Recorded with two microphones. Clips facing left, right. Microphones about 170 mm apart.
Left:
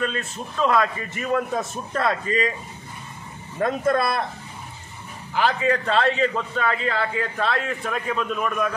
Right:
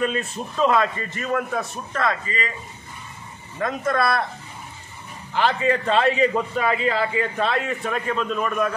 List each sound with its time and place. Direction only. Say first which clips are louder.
0.0 s a man's voice: right 3 dB; 10° right (ahead or behind)
0.9 s a man's voice: left 1 dB; 10° left (ahead or behind)
2.0 s speech: left 2 dB; 30° left (ahead or behind)
3.6 s speech: left 3 dB; 30° left (ahead or behind)
5.3 s a man's voice: right 1 dB; 5° left (ahead or behind)